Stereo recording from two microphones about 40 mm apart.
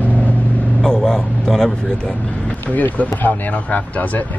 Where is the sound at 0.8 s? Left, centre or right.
Centre.